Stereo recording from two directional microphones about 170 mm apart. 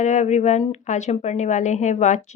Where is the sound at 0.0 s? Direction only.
45° left (ahead or behind).